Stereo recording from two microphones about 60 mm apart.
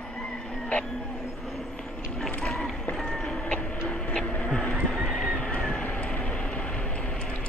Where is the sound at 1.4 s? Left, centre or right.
Centre.